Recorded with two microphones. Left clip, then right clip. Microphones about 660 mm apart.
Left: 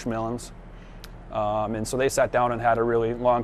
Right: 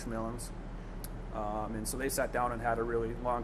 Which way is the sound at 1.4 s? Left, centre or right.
Left.